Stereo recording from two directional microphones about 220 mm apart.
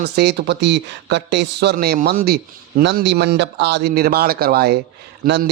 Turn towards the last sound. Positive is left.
turn(degrees=-40)  # may be behind; listen again after turning